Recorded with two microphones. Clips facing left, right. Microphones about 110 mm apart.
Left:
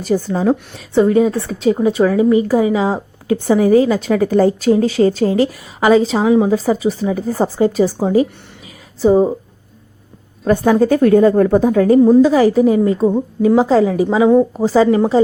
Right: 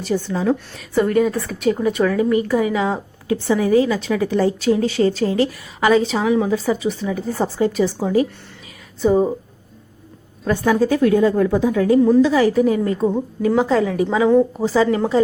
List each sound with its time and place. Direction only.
0.0 s a woman's voice: 40° left (ahead or behind)
6.8 s a woman's voice: 35° left (ahead or behind)
10.7 s a woman's voice: 45° left (ahead or behind); by 12.9 s 30° left (ahead or behind)
13.1 s a woman's voice: 15° left (ahead or behind)
13.6 s a woman's voice: 30° left (ahead or behind)
14.6 s a woman's voice: 40° left (ahead or behind)
14.8 s a woman's voice: 20° left (ahead or behind)